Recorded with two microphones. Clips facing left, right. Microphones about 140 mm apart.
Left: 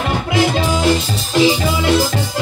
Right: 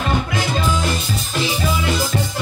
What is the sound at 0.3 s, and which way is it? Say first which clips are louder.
Music: left 5 dB; 90° left.